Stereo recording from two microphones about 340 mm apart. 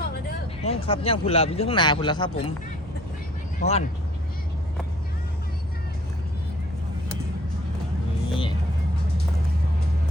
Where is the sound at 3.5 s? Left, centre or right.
Centre.